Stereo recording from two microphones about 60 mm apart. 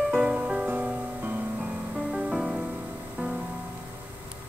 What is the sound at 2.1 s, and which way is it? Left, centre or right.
Music, centre.